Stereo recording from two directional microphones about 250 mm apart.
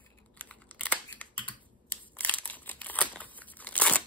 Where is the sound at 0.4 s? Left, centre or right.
Centre.